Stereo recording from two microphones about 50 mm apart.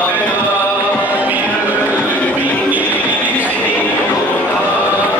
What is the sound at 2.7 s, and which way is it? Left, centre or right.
Music, right.